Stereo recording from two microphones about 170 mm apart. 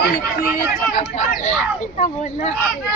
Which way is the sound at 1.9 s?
45° left (ahead or behind).